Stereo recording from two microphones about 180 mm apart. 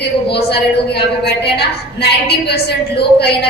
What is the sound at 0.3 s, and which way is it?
A woman's voice, 65° left (ahead or behind).